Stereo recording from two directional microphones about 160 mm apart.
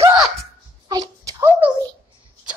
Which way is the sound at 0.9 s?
25° right (ahead or behind).